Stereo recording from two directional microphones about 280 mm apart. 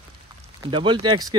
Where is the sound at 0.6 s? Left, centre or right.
Centre.